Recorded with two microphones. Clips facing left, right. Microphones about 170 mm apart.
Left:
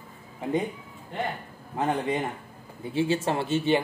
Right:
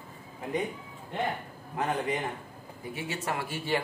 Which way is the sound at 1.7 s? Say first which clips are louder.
Left 4 dB; 30° left (ahead or behind).